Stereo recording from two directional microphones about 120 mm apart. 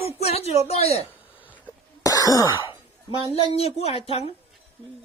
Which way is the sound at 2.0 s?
30° left (ahead or behind).